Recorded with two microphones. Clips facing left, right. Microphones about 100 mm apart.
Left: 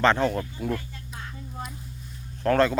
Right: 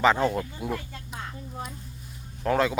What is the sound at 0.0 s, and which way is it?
Speech, 10° right (ahead or behind).